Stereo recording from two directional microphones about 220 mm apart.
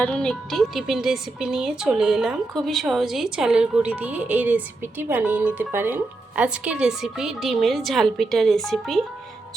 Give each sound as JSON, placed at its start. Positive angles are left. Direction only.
{"t": 0.0, "sound": "speech", "side_deg": 5}